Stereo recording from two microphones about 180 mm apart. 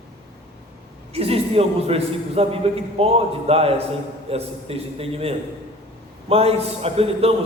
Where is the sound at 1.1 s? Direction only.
35° right (ahead or behind).